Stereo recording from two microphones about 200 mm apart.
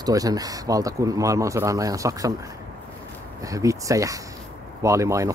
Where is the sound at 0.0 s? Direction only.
20° right (ahead or behind).